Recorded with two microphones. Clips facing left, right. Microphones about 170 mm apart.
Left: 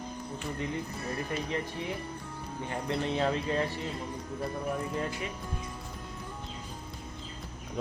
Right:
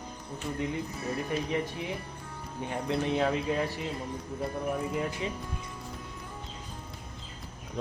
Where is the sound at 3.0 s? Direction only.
Centre (ahead or behind).